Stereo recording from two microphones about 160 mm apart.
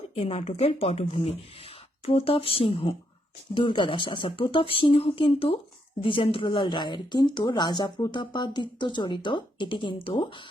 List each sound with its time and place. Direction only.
0.1 s speech: 35° left (ahead or behind)